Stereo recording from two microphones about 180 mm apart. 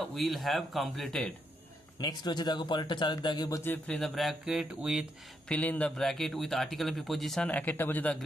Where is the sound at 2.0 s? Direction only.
20° left (ahead or behind); by 5.0 s 5° right (ahead or behind).